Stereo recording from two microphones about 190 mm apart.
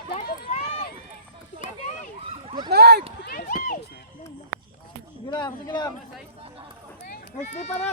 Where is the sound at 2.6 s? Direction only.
60° right (ahead or behind).